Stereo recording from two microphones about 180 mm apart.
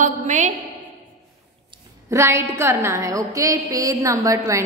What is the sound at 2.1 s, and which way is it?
A woman's voice, 15° right (ahead or behind).